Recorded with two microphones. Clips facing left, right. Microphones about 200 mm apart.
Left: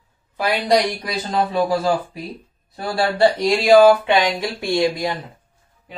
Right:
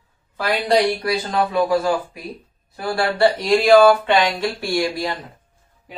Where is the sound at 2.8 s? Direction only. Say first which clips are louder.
Left 1 dB; 20° left (ahead or behind).